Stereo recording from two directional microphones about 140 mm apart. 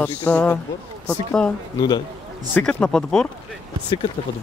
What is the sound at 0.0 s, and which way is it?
Speech, 10° left (ahead or behind).